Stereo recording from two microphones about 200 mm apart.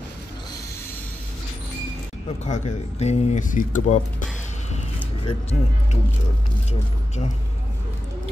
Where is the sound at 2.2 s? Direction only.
35° left (ahead or behind).